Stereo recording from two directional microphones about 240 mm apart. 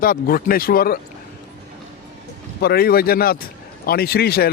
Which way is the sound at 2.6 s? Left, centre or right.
Left.